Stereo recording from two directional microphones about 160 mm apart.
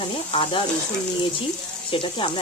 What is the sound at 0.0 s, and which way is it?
Sizzle, 35° left (ahead or behind).